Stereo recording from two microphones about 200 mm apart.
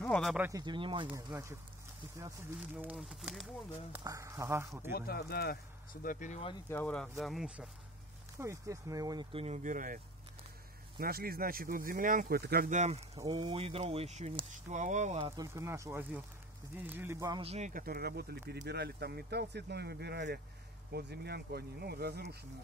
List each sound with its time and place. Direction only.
0.0 s speech: 5° left (ahead or behind)
0.5 s speech: 20° right (ahead or behind); by 3.4 s centre (ahead or behind)
3.9 s speech: 15° right (ahead or behind)
4.9 s speech: 50° left (ahead or behind)
6.0 s speech: 40° left (ahead or behind)
6.7 s speech: 10° left (ahead or behind)
8.4 s speech: 15° right (ahead or behind); by 9.9 s 40° right (ahead or behind)
11.0 s speech: 50° right (ahead or behind)
15.3 s speech: 15° right (ahead or behind)
17.4 s speech: 35° right (ahead or behind); by 22.4 s 55° right (ahead or behind)